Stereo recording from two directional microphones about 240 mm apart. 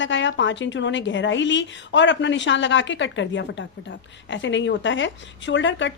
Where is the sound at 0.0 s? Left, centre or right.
Left.